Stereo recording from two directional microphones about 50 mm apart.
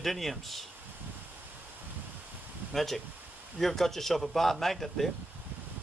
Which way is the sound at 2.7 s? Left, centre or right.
Centre.